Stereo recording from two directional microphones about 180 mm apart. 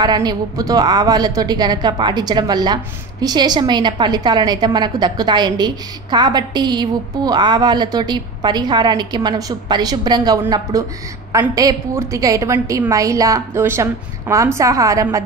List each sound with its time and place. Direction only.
0.0 s a woman's voice: 20° right (ahead or behind)